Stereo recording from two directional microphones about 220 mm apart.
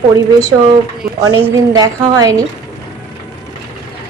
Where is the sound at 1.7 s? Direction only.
15° right (ahead or behind).